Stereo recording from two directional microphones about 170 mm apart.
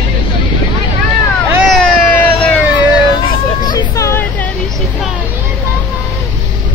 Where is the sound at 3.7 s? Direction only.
20° left (ahead or behind).